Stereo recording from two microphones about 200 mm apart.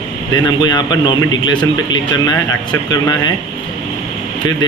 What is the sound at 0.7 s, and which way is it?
Speech, 20° left (ahead or behind).